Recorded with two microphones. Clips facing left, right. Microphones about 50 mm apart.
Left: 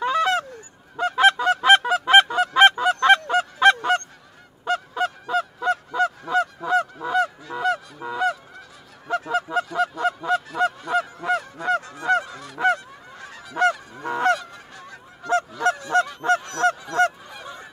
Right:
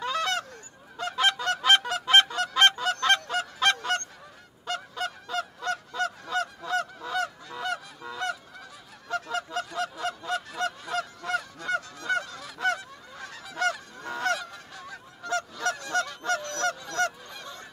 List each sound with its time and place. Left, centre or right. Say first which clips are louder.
0.0 s goose: left 8 dB; centre
0.9 s honk: left 9 dB; centre
8.0 s goose: left 8 dB; centre
9.2 s honk: left 8 dB; centre
12.7 s goose: left 3 dB; centre
13.6 s goose: left 7 dB; centre
14.4 s goose: left 1 dB; centre
15.2 s honk: left 8 dB; centre
16.2 s honk: left 8 dB; left
16.4 s goose: left 7 dB; centre